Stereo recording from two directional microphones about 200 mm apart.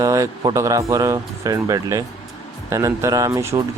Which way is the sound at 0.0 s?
15° right (ahead or behind).